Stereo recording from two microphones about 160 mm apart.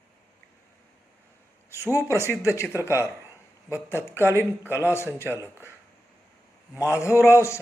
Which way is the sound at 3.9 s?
15° left (ahead or behind).